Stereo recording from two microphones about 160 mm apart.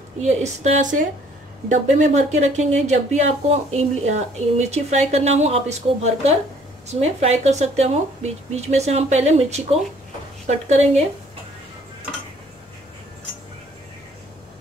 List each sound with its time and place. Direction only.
0.2 s speech: 45° right (ahead or behind)